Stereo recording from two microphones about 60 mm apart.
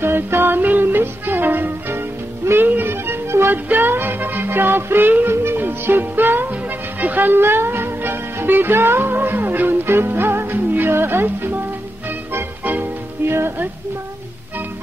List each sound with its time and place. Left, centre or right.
0.0 s music: right
3.5 s music: right
12.6 s music: right
13.3 s music: right